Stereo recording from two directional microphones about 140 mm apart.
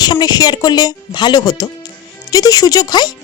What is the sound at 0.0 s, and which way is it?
A woman's voice, 30° left (ahead or behind).